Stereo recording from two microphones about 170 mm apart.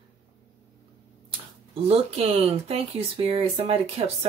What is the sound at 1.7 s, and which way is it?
Speech, 35° right (ahead or behind).